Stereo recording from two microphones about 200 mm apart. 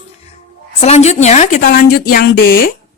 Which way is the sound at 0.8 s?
30° left (ahead or behind).